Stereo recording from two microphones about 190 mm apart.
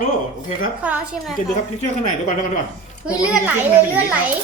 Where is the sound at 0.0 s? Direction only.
45° left (ahead or behind).